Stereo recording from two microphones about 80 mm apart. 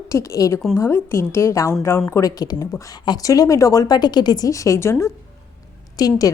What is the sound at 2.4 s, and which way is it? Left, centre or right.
Speech, left.